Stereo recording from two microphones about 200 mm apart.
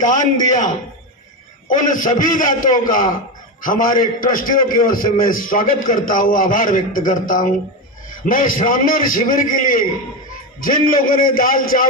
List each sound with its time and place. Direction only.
0.1 s a man's voice: 40° left (ahead or behind)